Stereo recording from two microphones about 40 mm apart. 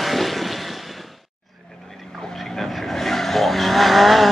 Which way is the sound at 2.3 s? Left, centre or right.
Centre.